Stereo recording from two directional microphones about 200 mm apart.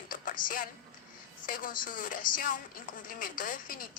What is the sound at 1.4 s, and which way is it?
Speech, 45° left (ahead or behind).